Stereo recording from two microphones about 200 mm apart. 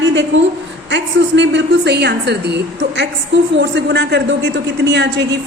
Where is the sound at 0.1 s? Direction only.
65° right (ahead or behind).